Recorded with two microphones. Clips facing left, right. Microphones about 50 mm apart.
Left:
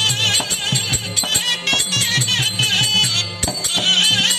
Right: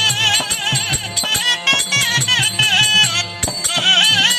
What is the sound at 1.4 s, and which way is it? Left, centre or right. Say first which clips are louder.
Music: right 5 dB; right.